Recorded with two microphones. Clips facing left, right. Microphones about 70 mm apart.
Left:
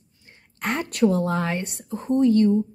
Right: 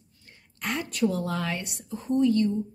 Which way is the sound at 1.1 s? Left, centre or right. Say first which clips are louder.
Left 6 dB; left.